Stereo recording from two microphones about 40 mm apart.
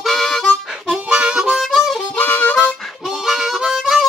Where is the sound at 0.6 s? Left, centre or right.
Centre.